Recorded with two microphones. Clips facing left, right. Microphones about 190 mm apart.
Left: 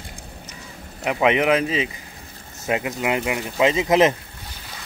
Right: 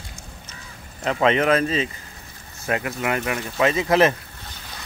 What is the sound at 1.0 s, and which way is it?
Speech, 15° left (ahead or behind).